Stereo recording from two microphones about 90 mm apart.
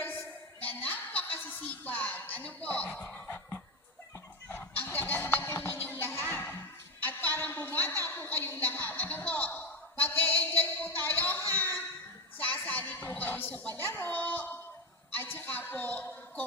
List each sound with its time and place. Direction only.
0.6 s music: 20° left (ahead or behind)
3.2 s cough: 25° left (ahead or behind)
4.4 s a sound: 20° left (ahead or behind)